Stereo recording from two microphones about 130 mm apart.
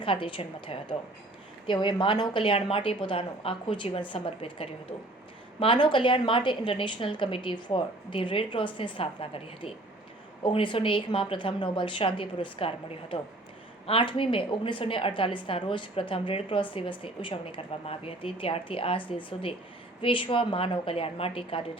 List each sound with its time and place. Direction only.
0.0 s a woman's voice: 40° left (ahead or behind)